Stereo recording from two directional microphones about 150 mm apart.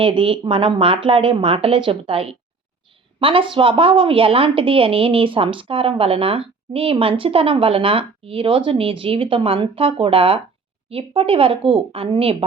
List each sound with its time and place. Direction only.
0.0 s a woman's voice: 35° right (ahead or behind)